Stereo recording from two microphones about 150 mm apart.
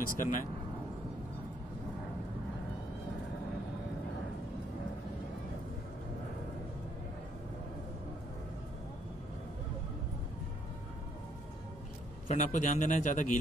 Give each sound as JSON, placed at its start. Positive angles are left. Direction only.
{"t": 0.0, "sound": "a man's voice", "side_deg": 65}
{"t": 12.3, "sound": "a man's voice", "side_deg": 55}